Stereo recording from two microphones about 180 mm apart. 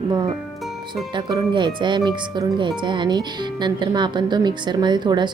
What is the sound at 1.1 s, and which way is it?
Speech, 25° right (ahead or behind).